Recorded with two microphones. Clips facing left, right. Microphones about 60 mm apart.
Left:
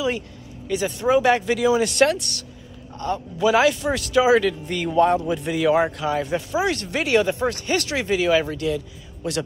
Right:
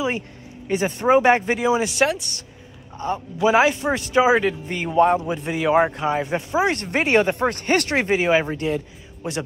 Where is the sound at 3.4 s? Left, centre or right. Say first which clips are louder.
Right 1 dB; right.